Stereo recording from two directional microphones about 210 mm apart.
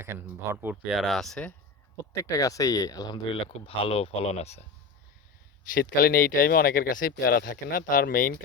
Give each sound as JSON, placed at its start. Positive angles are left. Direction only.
{"t": 0.0, "sound": "speech", "side_deg": -10}
{"t": 2.1, "sound": "speech", "side_deg": 15}
{"t": 5.7, "sound": "speech", "side_deg": 45}